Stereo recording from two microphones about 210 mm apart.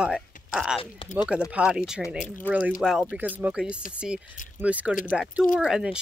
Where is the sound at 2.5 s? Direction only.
10° left (ahead or behind).